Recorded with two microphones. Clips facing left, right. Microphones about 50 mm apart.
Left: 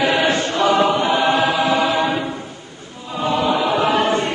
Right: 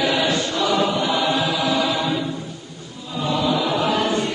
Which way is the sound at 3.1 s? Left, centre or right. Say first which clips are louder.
Left 3 dB; left.